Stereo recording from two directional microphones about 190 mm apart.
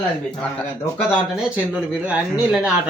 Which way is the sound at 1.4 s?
5° right (ahead or behind).